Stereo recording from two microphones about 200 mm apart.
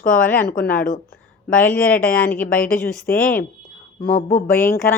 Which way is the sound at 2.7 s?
45° left (ahead or behind).